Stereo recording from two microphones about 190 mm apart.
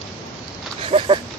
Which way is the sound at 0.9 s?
30° right (ahead or behind).